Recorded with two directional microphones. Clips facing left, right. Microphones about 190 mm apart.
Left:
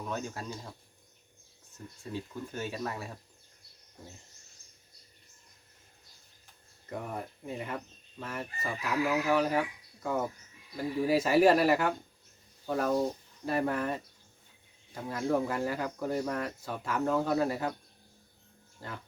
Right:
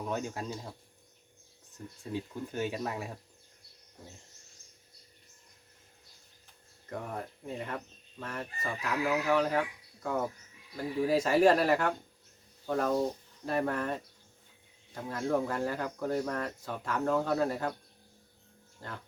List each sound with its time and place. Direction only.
0.1 s speech: 15° right (ahead or behind)
2.1 s speech: 15° right (ahead or behind)
6.9 s speech: 5° left (ahead or behind)
18.8 s speech: 10° left (ahead or behind)